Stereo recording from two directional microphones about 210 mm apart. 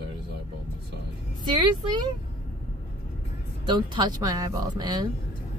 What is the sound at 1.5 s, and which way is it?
Speech, 20° right (ahead or behind).